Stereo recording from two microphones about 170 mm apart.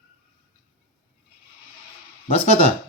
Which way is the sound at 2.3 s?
35° left (ahead or behind).